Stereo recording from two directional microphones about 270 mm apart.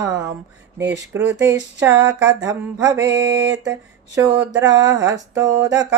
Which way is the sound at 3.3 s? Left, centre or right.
Right.